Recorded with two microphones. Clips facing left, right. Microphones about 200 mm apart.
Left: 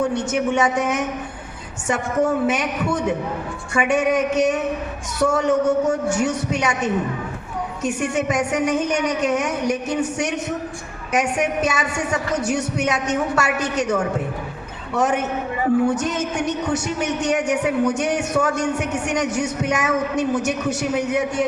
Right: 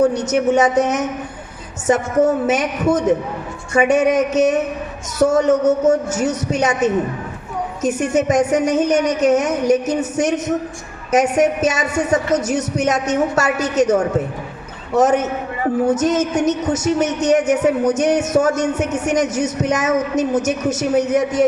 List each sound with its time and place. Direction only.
0.0 s a woman's voice: 40° right (ahead or behind)